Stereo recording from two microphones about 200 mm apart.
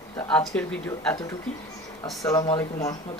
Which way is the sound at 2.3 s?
20° left (ahead or behind).